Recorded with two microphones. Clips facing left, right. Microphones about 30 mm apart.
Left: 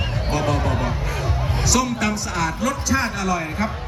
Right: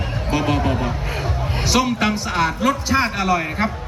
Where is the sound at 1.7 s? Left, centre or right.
Right.